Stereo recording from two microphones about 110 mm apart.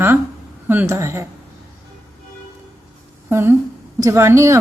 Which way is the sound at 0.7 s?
20° right (ahead or behind).